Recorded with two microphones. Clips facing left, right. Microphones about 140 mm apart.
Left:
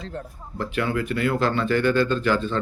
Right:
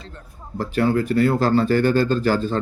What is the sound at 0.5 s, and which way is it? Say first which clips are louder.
A man's voice: right 5 dB; 40° right (ahead or behind).